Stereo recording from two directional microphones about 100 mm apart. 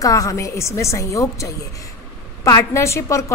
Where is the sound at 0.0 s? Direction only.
35° left (ahead or behind).